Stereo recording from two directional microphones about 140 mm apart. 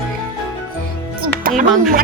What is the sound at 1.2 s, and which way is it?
Music, 85° right.